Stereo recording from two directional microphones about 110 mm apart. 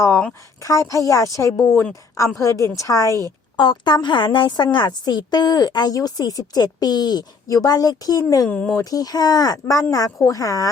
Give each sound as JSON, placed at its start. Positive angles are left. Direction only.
{"t": 0.6, "sound": "a woman's voice", "side_deg": 30}
{"t": 3.1, "sound": "a woman's voice", "side_deg": -30}
{"t": 3.6, "sound": "a woman's voice", "side_deg": 45}
{"t": 8.4, "sound": "speech", "side_deg": 10}
{"t": 8.8, "sound": "a woman's voice", "side_deg": 35}